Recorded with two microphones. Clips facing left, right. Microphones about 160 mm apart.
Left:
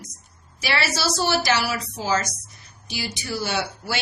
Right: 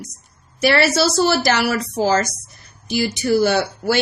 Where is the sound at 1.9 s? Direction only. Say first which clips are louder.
Right 7 dB; 45° right (ahead or behind).